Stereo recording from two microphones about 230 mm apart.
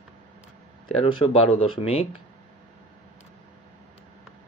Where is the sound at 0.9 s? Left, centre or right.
Left.